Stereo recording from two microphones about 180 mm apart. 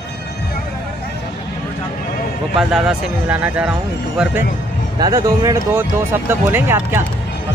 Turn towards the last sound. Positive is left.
turn(degrees=-15)  # may be behind; listen again after turning